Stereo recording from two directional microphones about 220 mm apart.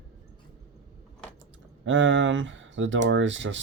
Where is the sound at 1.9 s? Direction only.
60° right (ahead or behind).